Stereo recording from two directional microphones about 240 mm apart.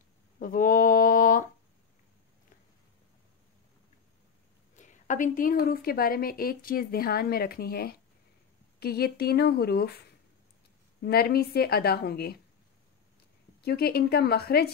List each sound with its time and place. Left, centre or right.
0.4 s a sound: left
4.7 s a woman's voice: left
11.0 s a woman's voice: left
13.6 s a woman's voice: left